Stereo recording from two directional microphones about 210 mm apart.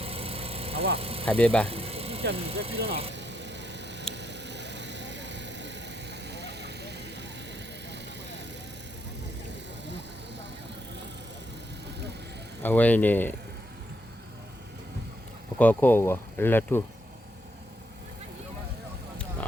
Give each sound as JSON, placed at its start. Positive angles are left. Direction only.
{"t": 0.0, "sound": "vehicle", "side_deg": -30}
{"t": 0.9, "sound": "speech", "side_deg": -25}
{"t": 1.2, "sound": "speech", "side_deg": 5}
{"t": 1.6, "sound": "a sound", "side_deg": -30}
{"t": 2.3, "sound": "speech", "side_deg": -30}
{"t": 3.1, "sound": "a sound", "side_deg": -55}
{"t": 12.6, "sound": "speech", "side_deg": 10}
{"t": 15.5, "sound": "speech", "side_deg": 10}